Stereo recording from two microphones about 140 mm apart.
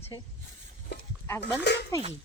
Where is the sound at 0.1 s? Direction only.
30° left (ahead or behind).